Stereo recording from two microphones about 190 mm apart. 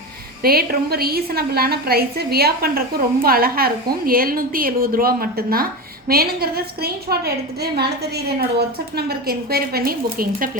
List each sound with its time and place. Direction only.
0.4 s a woman's voice: 50° right (ahead or behind)